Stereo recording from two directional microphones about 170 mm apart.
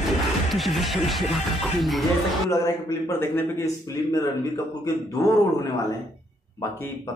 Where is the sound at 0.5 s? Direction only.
Centre (ahead or behind).